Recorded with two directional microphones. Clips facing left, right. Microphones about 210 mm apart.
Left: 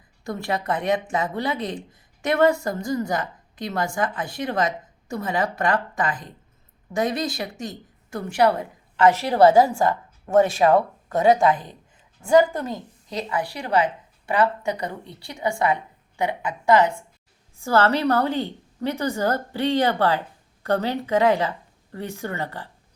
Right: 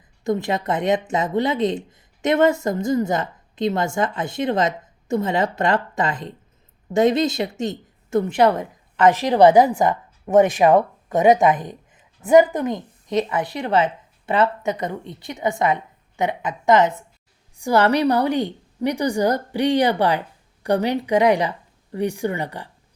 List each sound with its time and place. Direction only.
0.3 s a woman's voice: 20° right (ahead or behind)